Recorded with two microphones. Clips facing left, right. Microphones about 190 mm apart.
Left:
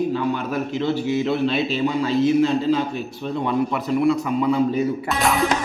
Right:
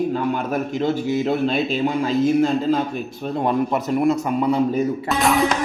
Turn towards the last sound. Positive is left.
turn(degrees=0)  # may be behind; listen again after turning